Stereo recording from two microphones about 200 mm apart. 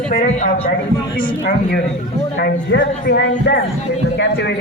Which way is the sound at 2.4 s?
55° left (ahead or behind).